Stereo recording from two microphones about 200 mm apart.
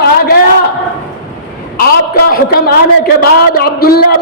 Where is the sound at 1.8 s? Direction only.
50° left (ahead or behind).